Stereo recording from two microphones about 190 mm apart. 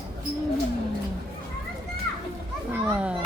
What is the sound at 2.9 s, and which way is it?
Children playing, 5° right (ahead or behind).